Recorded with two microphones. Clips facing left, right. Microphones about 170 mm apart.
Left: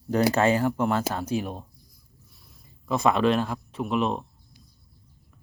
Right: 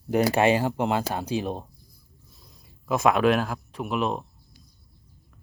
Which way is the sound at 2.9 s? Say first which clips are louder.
Right 1 dB; centre (ahead or behind).